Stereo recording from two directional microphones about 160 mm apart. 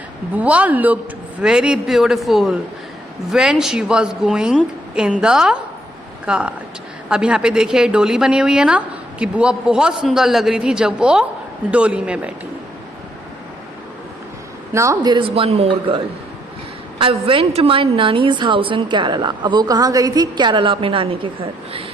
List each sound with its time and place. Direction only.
0.3 s a woman's voice: 10° right (ahead or behind)
14.7 s a woman's voice: 20° right (ahead or behind); by 16.0 s 40° right (ahead or behind)
17.0 s a woman's voice: 35° right (ahead or behind)